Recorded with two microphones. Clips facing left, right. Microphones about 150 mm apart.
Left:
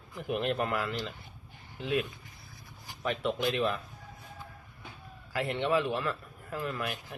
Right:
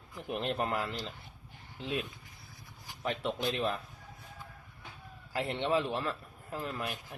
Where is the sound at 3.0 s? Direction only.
35° right (ahead or behind).